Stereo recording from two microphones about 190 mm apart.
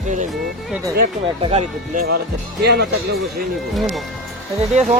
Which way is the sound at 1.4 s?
35° right (ahead or behind).